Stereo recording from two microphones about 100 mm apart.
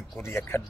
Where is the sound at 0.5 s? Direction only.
25° left (ahead or behind).